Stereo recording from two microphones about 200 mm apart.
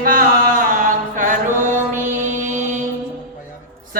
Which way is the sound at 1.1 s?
40° right (ahead or behind).